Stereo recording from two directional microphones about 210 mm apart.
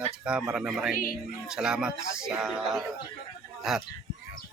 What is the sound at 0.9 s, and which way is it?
Speech, 40° left (ahead or behind).